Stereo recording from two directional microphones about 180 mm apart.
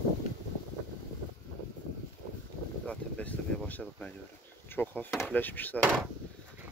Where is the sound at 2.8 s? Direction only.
5° left (ahead or behind).